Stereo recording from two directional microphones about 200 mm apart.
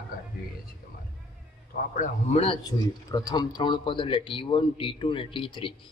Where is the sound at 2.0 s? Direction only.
30° left (ahead or behind).